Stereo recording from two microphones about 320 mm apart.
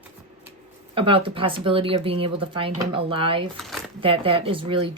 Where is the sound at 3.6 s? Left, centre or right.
Centre.